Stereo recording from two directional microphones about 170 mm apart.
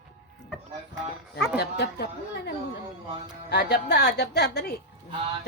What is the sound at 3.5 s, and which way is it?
Speech, 70° left (ahead or behind).